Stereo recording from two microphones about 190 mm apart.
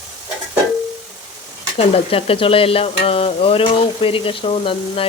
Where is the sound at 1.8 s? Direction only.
30° left (ahead or behind).